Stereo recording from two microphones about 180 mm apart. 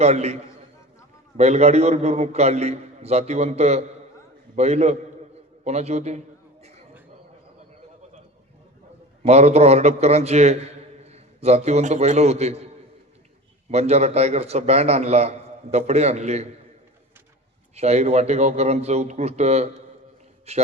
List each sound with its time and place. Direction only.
0.0 s a man's voice: 35° right (ahead or behind)
1.4 s a man's voice: 35° right (ahead or behind)
5.6 s a sound: 35° right (ahead or behind)
9.2 s a man's voice: 35° right (ahead or behind)
13.7 s a man's voice: 35° right (ahead or behind)
17.7 s a man's voice: 35° right (ahead or behind)